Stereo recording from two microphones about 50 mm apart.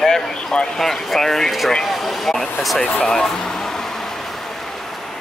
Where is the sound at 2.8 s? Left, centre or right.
Left.